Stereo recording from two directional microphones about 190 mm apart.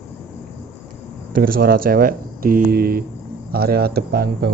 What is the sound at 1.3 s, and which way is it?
Speech, 50° right (ahead or behind).